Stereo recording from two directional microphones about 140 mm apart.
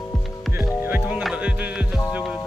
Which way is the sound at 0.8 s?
15° right (ahead or behind).